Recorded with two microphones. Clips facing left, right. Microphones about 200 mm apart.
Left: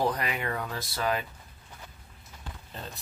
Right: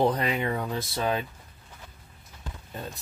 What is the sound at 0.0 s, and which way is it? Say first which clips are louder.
Speech: right 5 dB; 25° right (ahead or behind).